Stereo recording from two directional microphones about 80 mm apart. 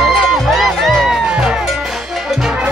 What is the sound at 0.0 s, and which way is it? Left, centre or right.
Music, centre.